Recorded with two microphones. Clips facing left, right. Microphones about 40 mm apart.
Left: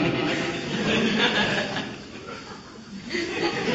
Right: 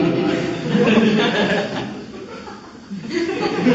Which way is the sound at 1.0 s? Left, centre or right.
Right.